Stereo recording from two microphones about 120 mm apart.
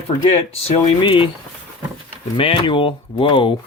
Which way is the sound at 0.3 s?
50° left (ahead or behind).